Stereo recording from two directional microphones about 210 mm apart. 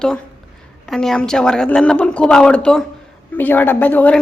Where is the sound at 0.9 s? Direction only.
Centre (ahead or behind).